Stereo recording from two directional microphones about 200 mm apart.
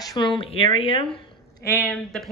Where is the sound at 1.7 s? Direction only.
5° left (ahead or behind).